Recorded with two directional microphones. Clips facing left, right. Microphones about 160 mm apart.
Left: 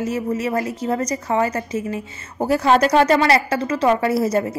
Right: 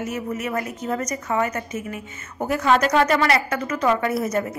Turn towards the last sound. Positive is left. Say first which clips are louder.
# left 4 dB
turn(degrees=30)  # may be behind; listen again after turning